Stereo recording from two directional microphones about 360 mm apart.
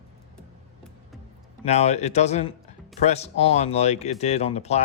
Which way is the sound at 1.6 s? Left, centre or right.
Centre.